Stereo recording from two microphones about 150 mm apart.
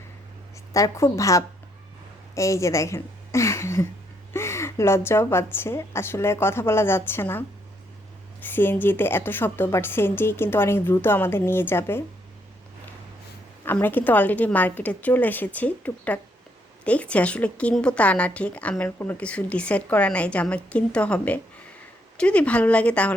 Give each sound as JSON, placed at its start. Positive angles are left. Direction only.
{"t": 0.7, "sound": "a woman's voice", "side_deg": 20}
{"t": 13.8, "sound": "speech", "side_deg": 10}